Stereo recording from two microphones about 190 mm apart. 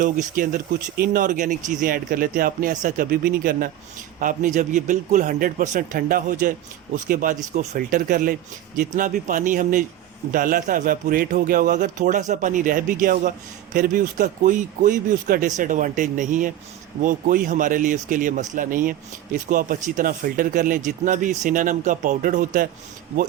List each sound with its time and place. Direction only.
0.0 s speech: 45° right (ahead or behind)